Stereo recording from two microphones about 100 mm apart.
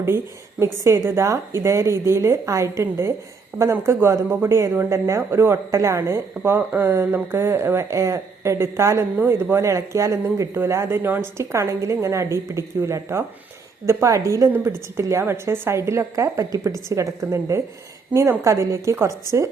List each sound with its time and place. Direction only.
0.6 s speech: 30° right (ahead or behind)